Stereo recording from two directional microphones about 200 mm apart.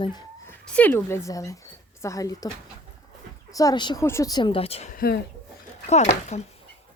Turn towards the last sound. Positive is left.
turn(degrees=30)  # may be behind; listen again after turning